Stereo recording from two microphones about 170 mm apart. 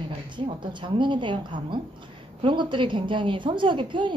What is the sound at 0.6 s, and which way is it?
A woman's voice, 30° right (ahead or behind).